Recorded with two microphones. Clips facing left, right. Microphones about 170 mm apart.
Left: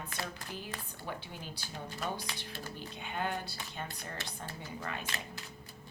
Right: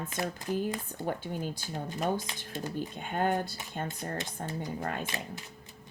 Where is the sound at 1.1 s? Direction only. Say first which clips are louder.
Right 9 dB; 50° right (ahead or behind).